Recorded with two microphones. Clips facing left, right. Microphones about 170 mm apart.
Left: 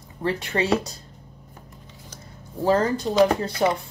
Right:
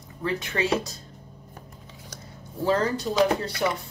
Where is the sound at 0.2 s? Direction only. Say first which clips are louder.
Left 3 dB; 30° left (ahead or behind).